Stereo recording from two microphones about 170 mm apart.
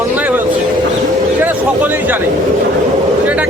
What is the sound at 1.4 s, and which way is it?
Speech, 10° right (ahead or behind).